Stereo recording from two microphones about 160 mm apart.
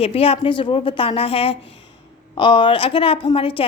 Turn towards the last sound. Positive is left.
turn(degrees=35)  # may be behind; listen again after turning